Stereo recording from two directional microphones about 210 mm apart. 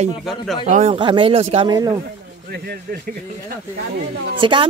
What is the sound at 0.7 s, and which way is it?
Speech, 30° right (ahead or behind).